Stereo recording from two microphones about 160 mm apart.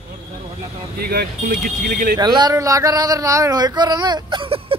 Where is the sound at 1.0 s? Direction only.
70° right (ahead or behind).